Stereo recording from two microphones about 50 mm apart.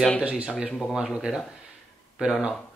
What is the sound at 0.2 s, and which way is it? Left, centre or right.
Speech, right.